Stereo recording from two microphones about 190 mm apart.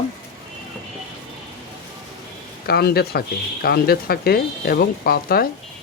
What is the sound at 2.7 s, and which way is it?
Speech, 55° left (ahead or behind).